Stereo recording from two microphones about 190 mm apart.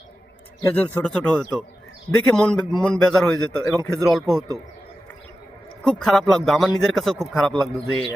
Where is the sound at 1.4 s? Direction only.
5° right (ahead or behind).